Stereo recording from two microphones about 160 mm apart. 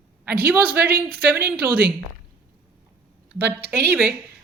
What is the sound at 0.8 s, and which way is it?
Speech, 70° right (ahead or behind).